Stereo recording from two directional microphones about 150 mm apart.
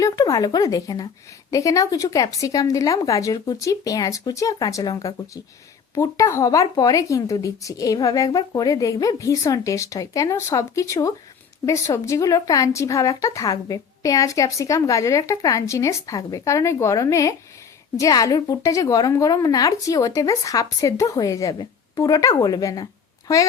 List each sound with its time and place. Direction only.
0.0 s a woman's voice: 25° left (ahead or behind)